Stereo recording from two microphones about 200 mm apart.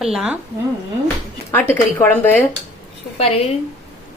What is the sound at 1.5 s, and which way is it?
Speech, 10° left (ahead or behind).